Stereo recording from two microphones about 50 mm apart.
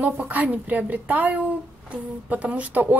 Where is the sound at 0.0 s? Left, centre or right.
Right.